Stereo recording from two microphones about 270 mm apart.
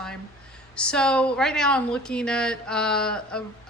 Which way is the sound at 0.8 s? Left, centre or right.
Centre.